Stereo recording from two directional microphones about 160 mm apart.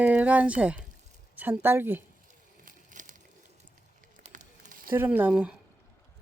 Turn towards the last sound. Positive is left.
turn(degrees=-5)  # may be behind; listen again after turning